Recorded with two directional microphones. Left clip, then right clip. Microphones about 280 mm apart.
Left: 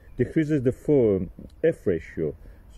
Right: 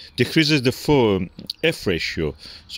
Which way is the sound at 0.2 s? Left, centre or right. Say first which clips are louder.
Right 6 dB; right.